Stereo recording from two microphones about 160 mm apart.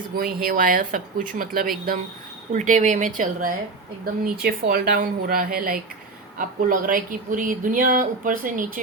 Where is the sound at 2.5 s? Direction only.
50° right (ahead or behind).